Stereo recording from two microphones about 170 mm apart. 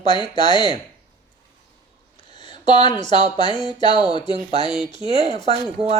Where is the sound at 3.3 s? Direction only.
25° left (ahead or behind).